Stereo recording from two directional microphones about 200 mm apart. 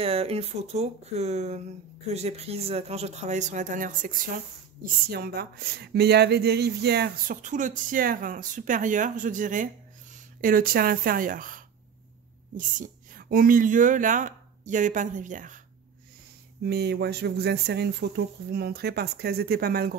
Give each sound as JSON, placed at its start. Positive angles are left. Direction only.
{"t": 0.0, "sound": "speech", "side_deg": -30}
{"t": 5.1, "sound": "speech", "side_deg": -50}
{"t": 7.4, "sound": "speech", "side_deg": -40}
{"t": 16.6, "sound": "speech", "side_deg": -55}